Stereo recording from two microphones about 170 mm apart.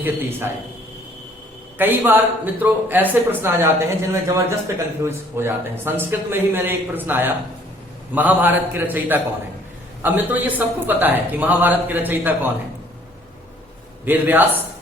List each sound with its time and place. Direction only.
0.0 s a man's voice: 10° right (ahead or behind)
1.8 s a man's voice: 10° right (ahead or behind)
14.0 s a man's voice: 10° right (ahead or behind)